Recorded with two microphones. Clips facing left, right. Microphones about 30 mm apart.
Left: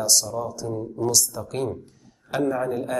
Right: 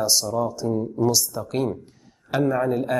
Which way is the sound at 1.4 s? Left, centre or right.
Centre.